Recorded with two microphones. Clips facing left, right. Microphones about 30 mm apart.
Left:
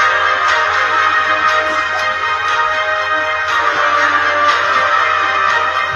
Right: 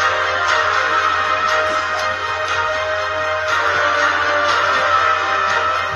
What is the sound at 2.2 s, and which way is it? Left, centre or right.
Music, left.